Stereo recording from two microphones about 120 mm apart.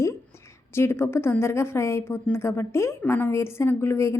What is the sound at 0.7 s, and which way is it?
A woman's voice, 20° left (ahead or behind).